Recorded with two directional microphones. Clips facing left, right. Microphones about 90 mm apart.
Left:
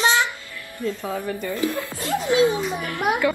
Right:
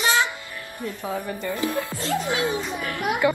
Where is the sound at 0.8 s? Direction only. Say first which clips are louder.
Left 3 dB; 20° right (ahead or behind).